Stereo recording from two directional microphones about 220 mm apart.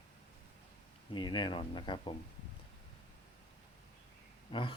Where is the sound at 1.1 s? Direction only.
20° left (ahead or behind).